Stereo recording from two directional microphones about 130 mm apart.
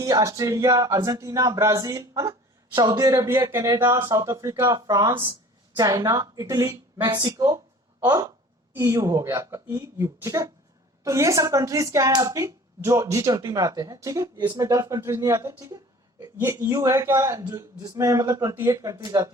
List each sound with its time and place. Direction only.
0.0 s speech: 25° right (ahead or behind)
14.7 s speech: 25° right (ahead or behind)